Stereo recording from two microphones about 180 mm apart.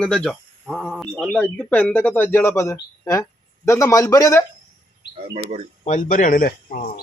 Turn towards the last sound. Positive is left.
turn(degrees=55)  # may be behind; listen again after turning